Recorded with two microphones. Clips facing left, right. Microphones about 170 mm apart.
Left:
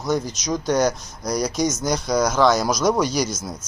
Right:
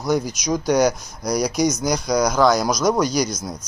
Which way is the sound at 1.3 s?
Centre (ahead or behind).